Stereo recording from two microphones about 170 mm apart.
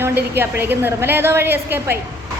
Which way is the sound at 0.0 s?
10° right (ahead or behind).